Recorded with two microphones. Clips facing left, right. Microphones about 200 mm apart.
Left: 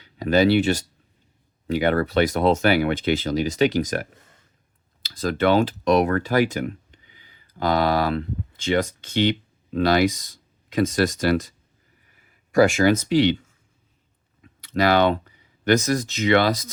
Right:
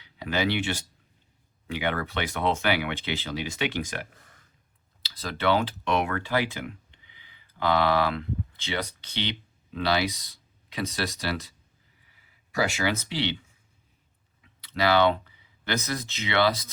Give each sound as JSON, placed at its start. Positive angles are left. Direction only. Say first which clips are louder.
{"t": 0.0, "sound": "speech", "louder": "left 9 dB", "side_deg": 40}
{"t": 5.0, "sound": "speech", "louder": "left 6 dB", "side_deg": 45}
{"t": 14.4, "sound": "speech", "louder": "left 5 dB", "side_deg": 45}